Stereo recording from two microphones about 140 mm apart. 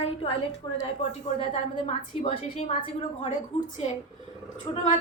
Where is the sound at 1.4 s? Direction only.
50° left (ahead or behind).